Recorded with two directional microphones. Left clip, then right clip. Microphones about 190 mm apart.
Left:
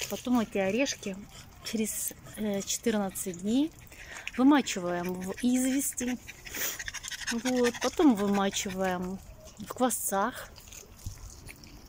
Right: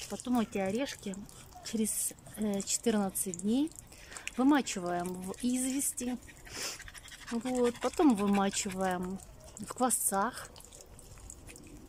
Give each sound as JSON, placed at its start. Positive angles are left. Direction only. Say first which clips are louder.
{"t": 0.1, "sound": "speech", "louder": "left 2 dB", "side_deg": 0}
{"t": 2.3, "sound": "speech", "louder": "left 3 dB", "side_deg": -5}
{"t": 6.8, "sound": "pant", "louder": "left 11 dB", "side_deg": 55}
{"t": 7.8, "sound": "speech", "louder": "left 3 dB", "side_deg": -5}